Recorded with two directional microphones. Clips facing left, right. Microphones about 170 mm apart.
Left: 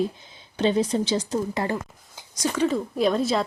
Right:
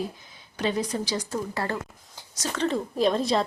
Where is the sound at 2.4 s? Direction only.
5° left (ahead or behind).